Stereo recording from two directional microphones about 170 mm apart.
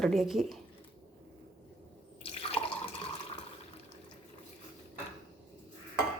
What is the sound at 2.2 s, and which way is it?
Drip, 35° left (ahead or behind).